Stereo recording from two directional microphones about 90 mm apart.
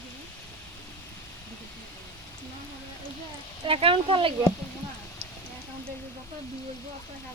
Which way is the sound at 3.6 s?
90° right.